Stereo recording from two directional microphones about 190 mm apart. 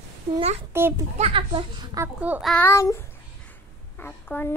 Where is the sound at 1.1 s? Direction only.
30° right (ahead or behind).